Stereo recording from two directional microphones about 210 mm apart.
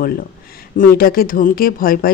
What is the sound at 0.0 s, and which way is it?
Speech, 45° left (ahead or behind).